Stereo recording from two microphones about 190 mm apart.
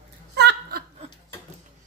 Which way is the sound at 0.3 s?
60° right (ahead or behind).